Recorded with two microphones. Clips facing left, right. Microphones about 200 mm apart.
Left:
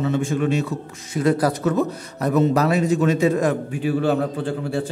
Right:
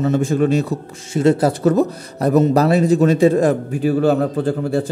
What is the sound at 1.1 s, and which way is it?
A man's voice, 25° right (ahead or behind).